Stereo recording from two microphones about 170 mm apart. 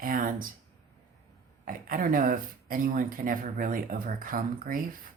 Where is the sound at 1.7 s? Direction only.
55° right (ahead or behind).